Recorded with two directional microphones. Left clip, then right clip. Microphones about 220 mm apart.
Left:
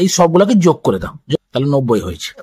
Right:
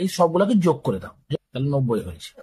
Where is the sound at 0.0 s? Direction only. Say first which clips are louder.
Left 8 dB; 45° left (ahead or behind).